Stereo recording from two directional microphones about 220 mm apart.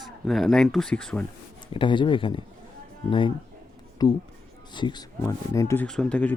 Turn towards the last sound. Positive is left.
turn(degrees=5)  # may be behind; listen again after turning